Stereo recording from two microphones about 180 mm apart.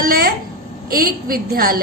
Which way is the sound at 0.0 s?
55° right (ahead or behind).